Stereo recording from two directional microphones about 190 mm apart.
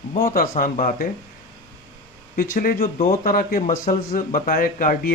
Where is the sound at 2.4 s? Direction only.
50° left (ahead or behind).